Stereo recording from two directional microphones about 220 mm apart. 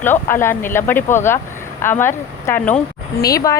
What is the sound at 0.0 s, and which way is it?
A woman's voice, 10° left (ahead or behind).